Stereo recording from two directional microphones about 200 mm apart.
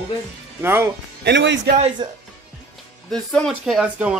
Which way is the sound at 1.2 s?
60° right (ahead or behind).